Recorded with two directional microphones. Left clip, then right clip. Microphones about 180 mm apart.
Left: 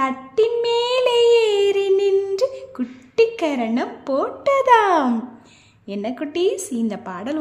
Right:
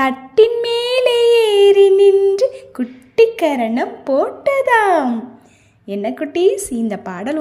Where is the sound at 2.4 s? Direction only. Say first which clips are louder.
Right 5 dB; 10° right (ahead or behind).